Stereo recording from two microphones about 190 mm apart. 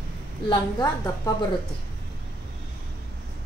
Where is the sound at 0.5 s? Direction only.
20° left (ahead or behind).